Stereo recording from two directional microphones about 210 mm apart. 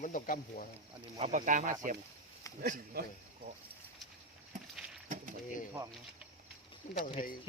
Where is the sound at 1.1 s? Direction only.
30° right (ahead or behind).